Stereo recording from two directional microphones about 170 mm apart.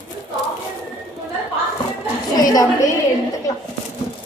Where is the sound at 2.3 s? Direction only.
20° left (ahead or behind).